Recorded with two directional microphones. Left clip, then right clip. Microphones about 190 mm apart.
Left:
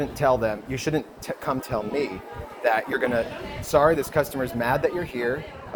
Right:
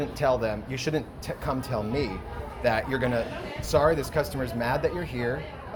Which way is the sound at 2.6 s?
55° left (ahead or behind).